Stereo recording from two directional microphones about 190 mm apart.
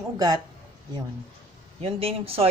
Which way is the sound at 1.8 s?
30° right (ahead or behind).